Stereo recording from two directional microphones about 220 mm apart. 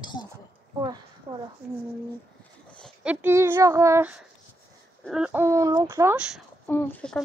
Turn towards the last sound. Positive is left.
turn(degrees=5)  # may be behind; listen again after turning